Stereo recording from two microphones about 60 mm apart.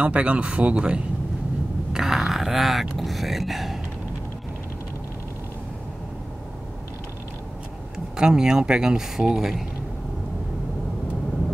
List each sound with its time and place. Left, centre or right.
0.0 s speech: right; by 3.8 s centre
8.2 s speech: centre